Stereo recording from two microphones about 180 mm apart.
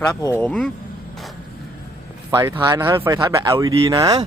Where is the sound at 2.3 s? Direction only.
15° right (ahead or behind).